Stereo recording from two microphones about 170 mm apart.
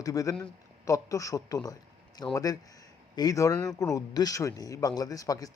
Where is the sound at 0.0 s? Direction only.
20° left (ahead or behind).